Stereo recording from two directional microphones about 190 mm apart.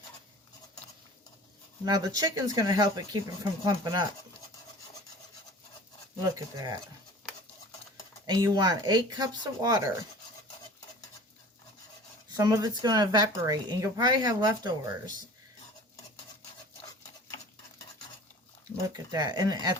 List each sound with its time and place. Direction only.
1.8 s speech: 20° right (ahead or behind)
6.2 s speech: 20° right (ahead or behind)
8.3 s speech: 20° right (ahead or behind)
12.4 s speech: 20° right (ahead or behind)
19.1 s speech: 20° right (ahead or behind)